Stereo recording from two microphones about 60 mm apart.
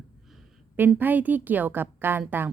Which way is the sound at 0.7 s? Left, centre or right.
Right.